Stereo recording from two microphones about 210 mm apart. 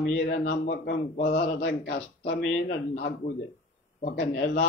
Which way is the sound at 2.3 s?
55° left (ahead or behind).